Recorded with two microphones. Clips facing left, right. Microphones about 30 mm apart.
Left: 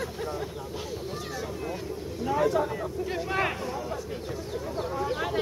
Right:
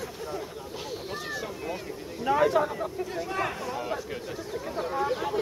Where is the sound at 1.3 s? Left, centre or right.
Centre.